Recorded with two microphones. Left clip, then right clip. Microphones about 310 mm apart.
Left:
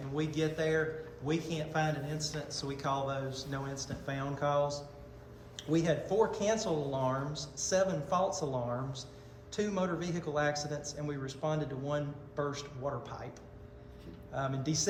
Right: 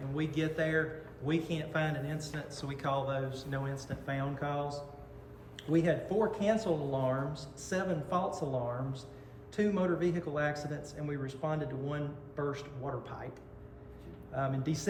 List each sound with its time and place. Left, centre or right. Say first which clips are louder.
0.2 s speech: even; centre
9.6 s speech: right 3 dB; centre
14.3 s speech: even; centre